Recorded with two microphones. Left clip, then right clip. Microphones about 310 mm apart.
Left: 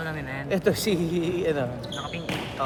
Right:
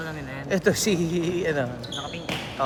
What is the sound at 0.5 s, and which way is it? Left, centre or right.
Speech, right.